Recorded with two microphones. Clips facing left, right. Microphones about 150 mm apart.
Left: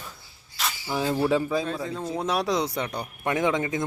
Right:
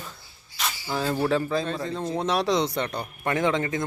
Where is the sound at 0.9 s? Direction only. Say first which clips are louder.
Left 1 dB; 15° left (ahead or behind).